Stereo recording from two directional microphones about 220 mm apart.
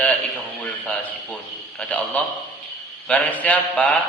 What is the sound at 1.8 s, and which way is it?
A man's voice, 5° left (ahead or behind).